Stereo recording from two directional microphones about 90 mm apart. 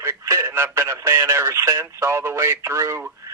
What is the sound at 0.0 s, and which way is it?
Speech, 30° right (ahead or behind).